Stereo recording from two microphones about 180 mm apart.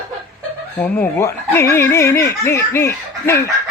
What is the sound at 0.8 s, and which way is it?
Speech, 10° left (ahead or behind).